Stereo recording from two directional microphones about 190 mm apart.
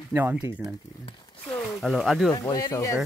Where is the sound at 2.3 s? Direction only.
20° left (ahead or behind).